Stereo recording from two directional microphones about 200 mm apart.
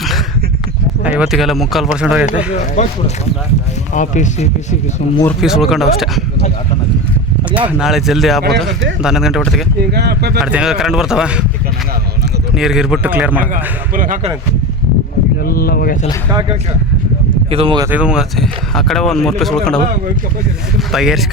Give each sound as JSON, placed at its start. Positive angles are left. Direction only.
{"t": 1.2, "sound": "speech", "side_deg": 0}
{"t": 2.8, "sound": "speech", "side_deg": 35}
{"t": 3.9, "sound": "speech", "side_deg": 40}
{"t": 5.4, "sound": "speech", "side_deg": 0}
{"t": 7.8, "sound": "speech", "side_deg": 0}
{"t": 9.9, "sound": "a man's voice", "side_deg": -55}
{"t": 10.4, "sound": "speech", "side_deg": -5}
{"t": 12.5, "sound": "speech", "side_deg": 0}
{"t": 13.4, "sound": "a man's voice", "side_deg": -45}
{"t": 15.4, "sound": "speech", "side_deg": 50}
{"t": 16.3, "sound": "speech", "side_deg": -20}
{"t": 17.9, "sound": "speech", "side_deg": -5}